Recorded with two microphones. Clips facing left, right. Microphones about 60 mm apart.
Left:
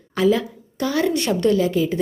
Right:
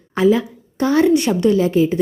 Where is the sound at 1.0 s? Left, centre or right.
Centre.